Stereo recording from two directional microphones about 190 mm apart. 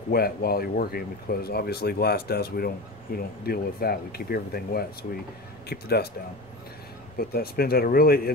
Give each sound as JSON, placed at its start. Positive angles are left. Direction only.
{"t": 0.1, "sound": "speech", "side_deg": 55}
{"t": 7.2, "sound": "speech", "side_deg": 55}